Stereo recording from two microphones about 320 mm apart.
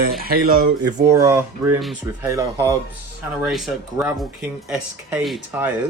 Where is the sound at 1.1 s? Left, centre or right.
Centre.